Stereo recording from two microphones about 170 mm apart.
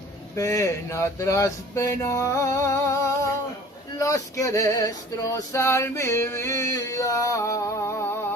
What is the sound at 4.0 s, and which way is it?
Male singing, 20° left (ahead or behind).